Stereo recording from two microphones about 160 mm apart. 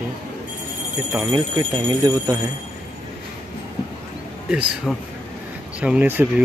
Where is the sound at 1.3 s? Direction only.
25° right (ahead or behind).